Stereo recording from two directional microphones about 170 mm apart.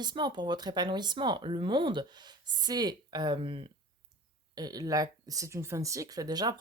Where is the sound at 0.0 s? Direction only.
25° right (ahead or behind).